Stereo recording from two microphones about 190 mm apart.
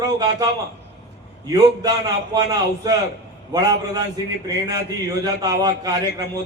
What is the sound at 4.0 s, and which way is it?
A man's voice, 20° right (ahead or behind).